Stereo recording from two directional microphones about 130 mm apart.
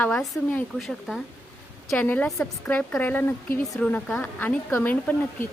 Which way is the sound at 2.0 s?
15° left (ahead or behind).